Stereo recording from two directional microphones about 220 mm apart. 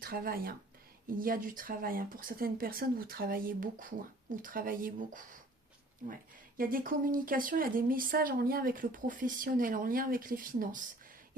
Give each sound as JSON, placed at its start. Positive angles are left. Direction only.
{"t": 0.0, "sound": "speech", "side_deg": -40}
{"t": 6.6, "sound": "speech", "side_deg": -40}